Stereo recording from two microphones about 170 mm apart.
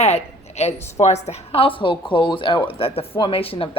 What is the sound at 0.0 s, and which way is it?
A woman's voice, 40° left (ahead or behind).